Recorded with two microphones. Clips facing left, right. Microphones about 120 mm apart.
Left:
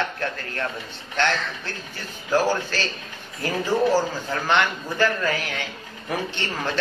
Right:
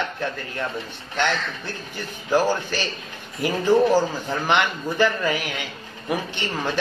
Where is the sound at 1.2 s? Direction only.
15° right (ahead or behind).